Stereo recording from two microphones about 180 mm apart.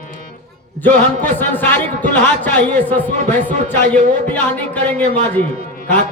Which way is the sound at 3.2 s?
45° right (ahead or behind).